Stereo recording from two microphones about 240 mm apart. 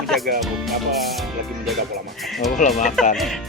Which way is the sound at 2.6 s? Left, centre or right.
Left.